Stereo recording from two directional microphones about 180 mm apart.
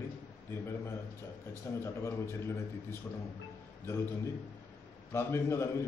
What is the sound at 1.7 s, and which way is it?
A man's voice, 15° left (ahead or behind).